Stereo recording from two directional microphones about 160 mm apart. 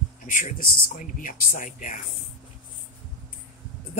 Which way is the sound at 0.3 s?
55° left (ahead or behind).